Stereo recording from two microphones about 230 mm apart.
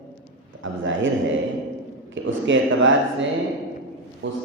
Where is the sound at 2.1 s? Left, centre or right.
Right.